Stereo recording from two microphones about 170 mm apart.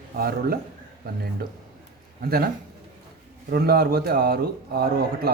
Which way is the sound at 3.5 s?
65° right (ahead or behind).